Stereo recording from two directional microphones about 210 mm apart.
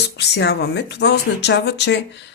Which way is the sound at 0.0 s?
55° left (ahead or behind).